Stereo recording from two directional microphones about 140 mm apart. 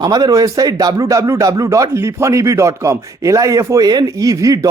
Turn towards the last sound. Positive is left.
turn(degrees=-25)  # may be behind; listen again after turning